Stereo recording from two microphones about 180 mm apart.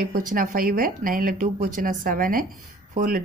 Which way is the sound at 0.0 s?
50° right (ahead or behind).